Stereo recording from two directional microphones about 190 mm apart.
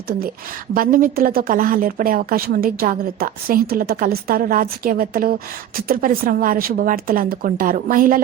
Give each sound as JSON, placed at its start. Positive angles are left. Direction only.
{"t": 0.7, "sound": "a woman's voice", "side_deg": -50}